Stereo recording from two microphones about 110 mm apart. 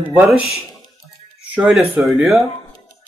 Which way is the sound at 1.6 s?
Centre (ahead or behind).